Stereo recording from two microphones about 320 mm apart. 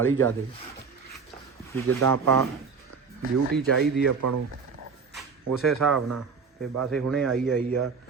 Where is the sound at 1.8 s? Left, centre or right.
Right.